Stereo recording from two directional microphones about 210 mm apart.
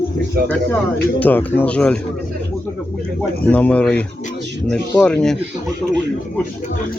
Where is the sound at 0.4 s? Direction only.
45° right (ahead or behind).